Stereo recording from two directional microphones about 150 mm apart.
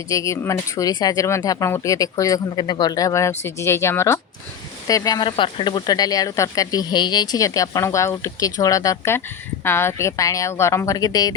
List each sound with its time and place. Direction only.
0.1 s speech: 20° left (ahead or behind)